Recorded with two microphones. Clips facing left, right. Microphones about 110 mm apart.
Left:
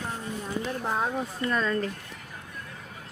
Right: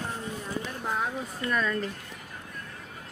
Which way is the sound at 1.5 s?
25° left (ahead or behind).